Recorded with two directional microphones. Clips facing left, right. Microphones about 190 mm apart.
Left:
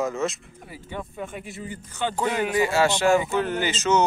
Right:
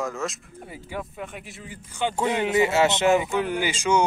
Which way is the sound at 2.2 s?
25° right (ahead or behind).